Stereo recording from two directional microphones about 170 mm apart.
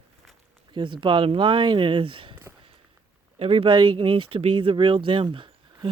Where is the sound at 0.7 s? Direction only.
30° right (ahead or behind).